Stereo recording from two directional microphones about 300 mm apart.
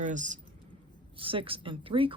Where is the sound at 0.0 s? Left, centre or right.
Right.